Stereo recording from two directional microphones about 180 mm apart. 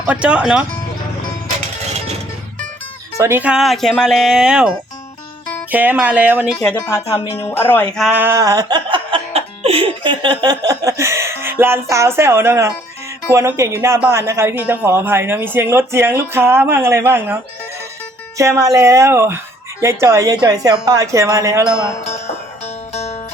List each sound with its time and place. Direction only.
0.1 s speech: 5° right (ahead or behind)
3.2 s speech: 15° right (ahead or behind)
5.7 s speech: 10° right (ahead or behind)
7.0 s speech: 35° left (ahead or behind)
7.3 s speech: 10° left (ahead or behind)
7.9 s music: 5° right (ahead or behind); by 10.3 s 25° right (ahead or behind)
10.4 s a sound: 20° right (ahead or behind)
10.8 s speech: 15° right (ahead or behind)
22.9 s music: 35° left (ahead or behind)